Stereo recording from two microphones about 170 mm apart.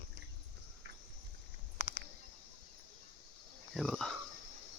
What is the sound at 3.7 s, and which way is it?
Dog, centre (ahead or behind).